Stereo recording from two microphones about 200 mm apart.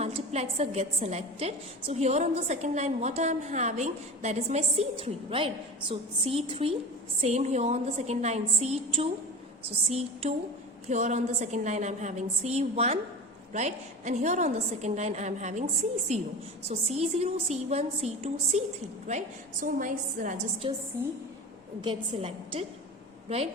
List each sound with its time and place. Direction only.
0.0 s a woman's voice: 30° right (ahead or behind)
10.8 s a woman's voice: 35° right (ahead or behind)
20.6 s a woman's voice: 25° right (ahead or behind)